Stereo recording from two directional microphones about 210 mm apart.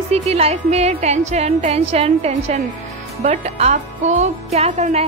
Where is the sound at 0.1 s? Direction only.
30° right (ahead or behind).